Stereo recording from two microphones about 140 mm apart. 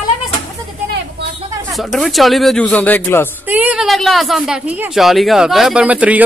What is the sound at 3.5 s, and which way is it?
Speech, 10° right (ahead or behind).